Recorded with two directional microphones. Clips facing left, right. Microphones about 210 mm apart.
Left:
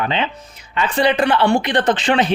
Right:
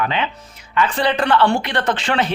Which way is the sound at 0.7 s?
15° left (ahead or behind).